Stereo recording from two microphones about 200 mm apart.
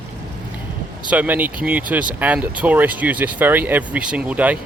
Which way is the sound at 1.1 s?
10° right (ahead or behind).